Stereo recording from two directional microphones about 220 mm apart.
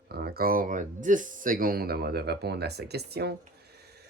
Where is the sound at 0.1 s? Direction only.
45° right (ahead or behind).